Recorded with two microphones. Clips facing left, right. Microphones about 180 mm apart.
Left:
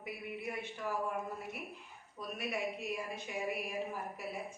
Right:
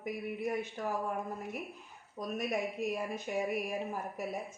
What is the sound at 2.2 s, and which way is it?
Speech, 45° right (ahead or behind).